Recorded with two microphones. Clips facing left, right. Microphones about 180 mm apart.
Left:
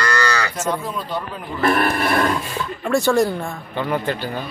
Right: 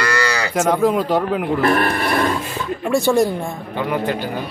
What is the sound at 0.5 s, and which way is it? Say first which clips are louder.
Speech: right 8 dB; 90° right.